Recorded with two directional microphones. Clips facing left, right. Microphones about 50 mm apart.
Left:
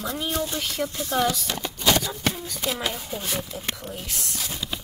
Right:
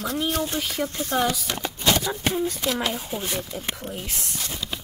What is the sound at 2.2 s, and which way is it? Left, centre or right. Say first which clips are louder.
Speech: right 4 dB; right.